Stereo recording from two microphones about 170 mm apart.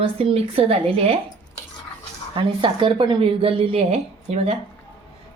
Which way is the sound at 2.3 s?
30° right (ahead or behind).